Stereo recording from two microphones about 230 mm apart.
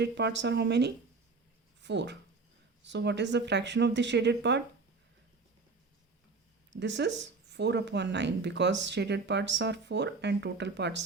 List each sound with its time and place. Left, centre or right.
0.0 s speech: right
6.7 s speech: right